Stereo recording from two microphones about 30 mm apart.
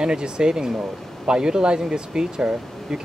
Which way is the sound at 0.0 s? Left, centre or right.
Right.